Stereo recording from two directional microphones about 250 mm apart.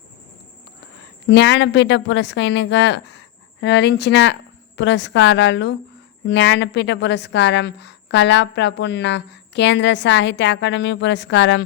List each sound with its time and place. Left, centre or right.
1.3 s a woman's voice: left